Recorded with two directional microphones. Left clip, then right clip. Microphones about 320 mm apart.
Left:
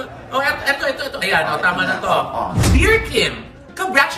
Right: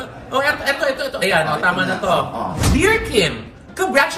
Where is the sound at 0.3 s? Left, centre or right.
Centre.